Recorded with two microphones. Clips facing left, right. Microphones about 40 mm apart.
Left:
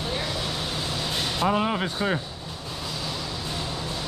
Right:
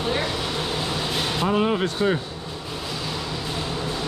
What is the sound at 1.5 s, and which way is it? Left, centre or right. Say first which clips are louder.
Speech: right 3 dB; centre.